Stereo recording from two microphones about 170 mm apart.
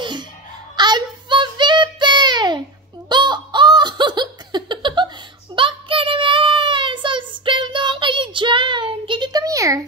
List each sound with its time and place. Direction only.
0.0 s a sound: 25° right (ahead or behind)
0.7 s child singing: 25° right (ahead or behind)
3.1 s laughter: 25° right (ahead or behind)
5.6 s child singing: 30° right (ahead or behind)